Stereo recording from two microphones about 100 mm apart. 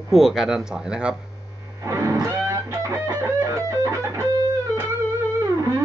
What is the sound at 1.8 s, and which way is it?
Music, 30° right (ahead or behind).